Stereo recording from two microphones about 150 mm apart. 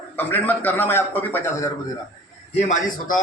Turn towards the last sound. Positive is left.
turn(degrees=60)  # may be behind; listen again after turning